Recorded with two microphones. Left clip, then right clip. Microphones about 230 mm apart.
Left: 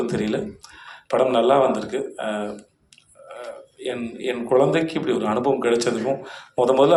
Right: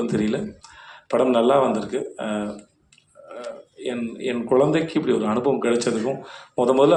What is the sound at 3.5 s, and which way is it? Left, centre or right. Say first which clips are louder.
A man's voice: even; left.